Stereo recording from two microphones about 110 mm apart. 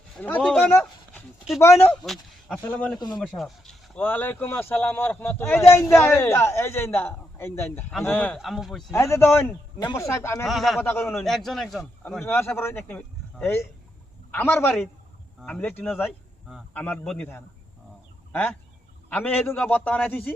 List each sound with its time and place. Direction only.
0.2 s speech: 10° left (ahead or behind)
1.9 s speech: 5° left (ahead or behind)
3.9 s speech: 15° left (ahead or behind)
7.9 s speech: 10° left (ahead or behind)
8.4 s speech: centre (ahead or behind)
8.9 s speech: 25° left (ahead or behind)
10.4 s speech: centre (ahead or behind)
10.8 s speech: 20° left (ahead or behind)
11.2 s speech: centre (ahead or behind)
12.2 s speech: 20° left (ahead or behind)
15.4 s speech: centre (ahead or behind)
15.6 s speech: 15° left (ahead or behind)